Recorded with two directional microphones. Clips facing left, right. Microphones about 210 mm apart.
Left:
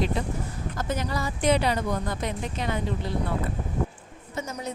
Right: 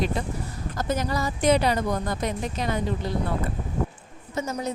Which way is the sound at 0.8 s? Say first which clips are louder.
Right 3 dB; 40° right (ahead or behind).